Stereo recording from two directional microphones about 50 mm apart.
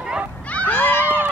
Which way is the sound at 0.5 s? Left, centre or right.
Left.